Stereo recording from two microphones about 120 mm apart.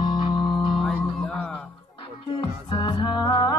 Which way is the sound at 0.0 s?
35° left (ahead or behind).